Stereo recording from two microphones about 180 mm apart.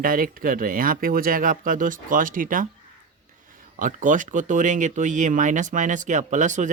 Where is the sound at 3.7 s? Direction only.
45° right (ahead or behind).